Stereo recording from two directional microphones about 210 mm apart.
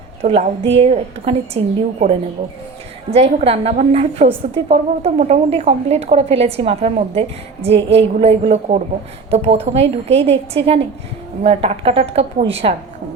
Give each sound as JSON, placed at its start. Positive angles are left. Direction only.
{"t": 0.2, "sound": "speech", "side_deg": -30}